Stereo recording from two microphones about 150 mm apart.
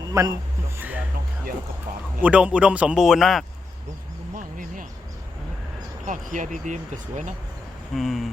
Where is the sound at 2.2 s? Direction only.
10° right (ahead or behind).